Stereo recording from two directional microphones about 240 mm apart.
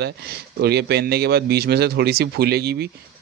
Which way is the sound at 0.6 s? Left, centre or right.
Right.